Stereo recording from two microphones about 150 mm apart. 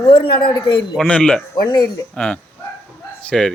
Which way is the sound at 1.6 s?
25° left (ahead or behind).